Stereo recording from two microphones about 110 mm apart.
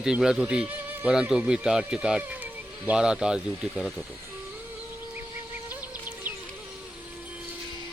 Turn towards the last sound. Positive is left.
turn(degrees=-15)  # may be behind; listen again after turning